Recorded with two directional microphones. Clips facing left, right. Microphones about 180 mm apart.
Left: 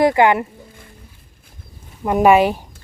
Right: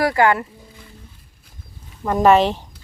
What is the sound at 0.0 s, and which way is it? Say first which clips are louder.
Speech: left 3 dB; 20° left (ahead or behind).